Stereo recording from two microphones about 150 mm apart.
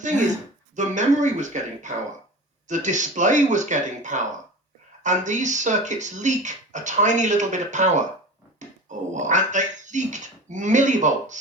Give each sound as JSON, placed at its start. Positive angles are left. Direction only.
{"t": 0.8, "sound": "speech", "side_deg": -55}